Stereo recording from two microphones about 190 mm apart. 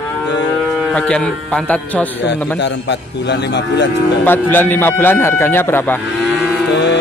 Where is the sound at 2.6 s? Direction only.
65° left (ahead or behind).